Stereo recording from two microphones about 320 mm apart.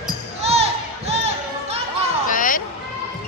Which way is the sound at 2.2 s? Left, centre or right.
Left.